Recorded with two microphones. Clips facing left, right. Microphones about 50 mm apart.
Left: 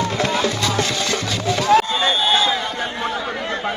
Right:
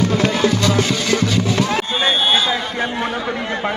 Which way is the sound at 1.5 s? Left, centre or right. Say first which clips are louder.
Left 3 dB; right.